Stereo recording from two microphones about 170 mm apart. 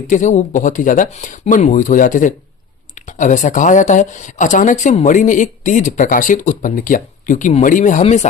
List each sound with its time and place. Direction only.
0.1 s speech: 45° left (ahead or behind)